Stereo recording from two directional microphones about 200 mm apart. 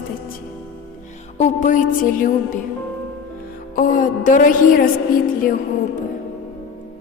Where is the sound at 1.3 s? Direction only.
35° left (ahead or behind).